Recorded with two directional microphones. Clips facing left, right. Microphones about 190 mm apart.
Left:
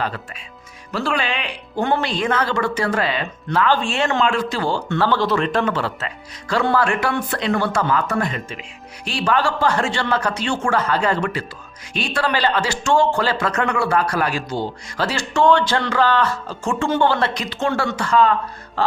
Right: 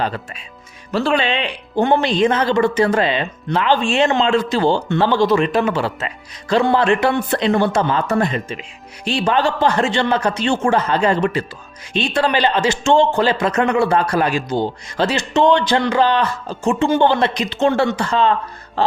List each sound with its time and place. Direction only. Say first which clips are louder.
0.9 s speech: right 5 dB; 25° right (ahead or behind)